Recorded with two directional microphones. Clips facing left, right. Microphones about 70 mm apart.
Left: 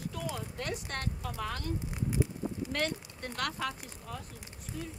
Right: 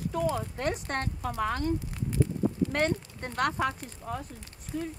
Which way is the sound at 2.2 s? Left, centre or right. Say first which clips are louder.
Right 6 dB; centre.